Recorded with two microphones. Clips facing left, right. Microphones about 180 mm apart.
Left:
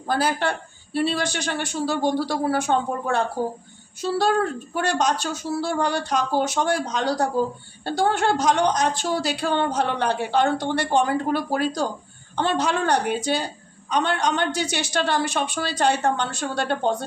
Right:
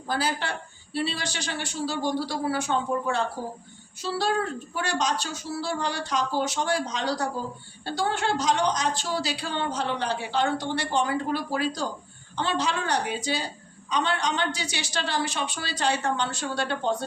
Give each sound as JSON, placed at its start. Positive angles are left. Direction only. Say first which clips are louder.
{"t": 0.1, "sound": "speech", "louder": "left 5 dB", "side_deg": 55}